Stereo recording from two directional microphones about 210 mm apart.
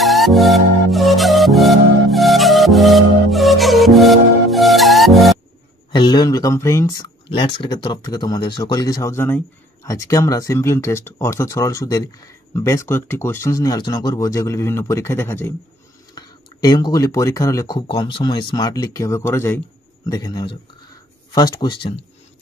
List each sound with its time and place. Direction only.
0.0 s music: centre (ahead or behind)
5.9 s speech: 20° left (ahead or behind)